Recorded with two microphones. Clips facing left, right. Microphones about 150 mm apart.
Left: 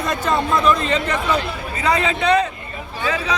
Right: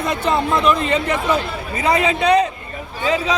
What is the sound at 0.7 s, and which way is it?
A man's voice, 10° right (ahead or behind).